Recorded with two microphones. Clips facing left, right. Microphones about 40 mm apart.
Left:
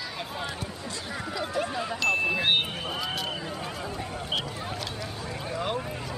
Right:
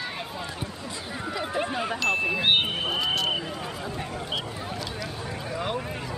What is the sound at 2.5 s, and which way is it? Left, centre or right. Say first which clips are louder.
Speech: right 3 dB; right.